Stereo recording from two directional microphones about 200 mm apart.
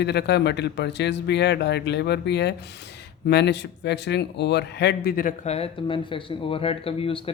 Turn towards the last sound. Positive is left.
turn(degrees=25)  # may be behind; listen again after turning